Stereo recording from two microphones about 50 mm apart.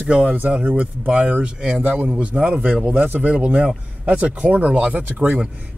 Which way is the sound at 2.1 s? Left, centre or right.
Right.